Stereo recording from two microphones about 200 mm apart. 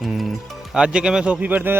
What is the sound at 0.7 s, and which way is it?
Speech, 5° right (ahead or behind).